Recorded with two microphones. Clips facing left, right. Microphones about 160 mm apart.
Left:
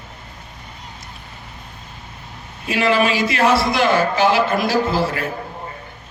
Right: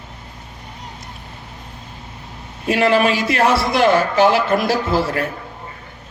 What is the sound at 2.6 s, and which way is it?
Speech, 55° right (ahead or behind).